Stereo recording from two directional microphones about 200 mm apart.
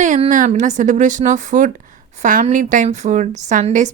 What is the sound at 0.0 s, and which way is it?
A woman's voice, 40° right (ahead or behind).